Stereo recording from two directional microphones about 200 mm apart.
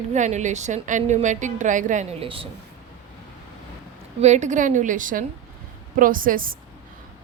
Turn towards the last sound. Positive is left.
turn(degrees=-45)  # may be behind; listen again after turning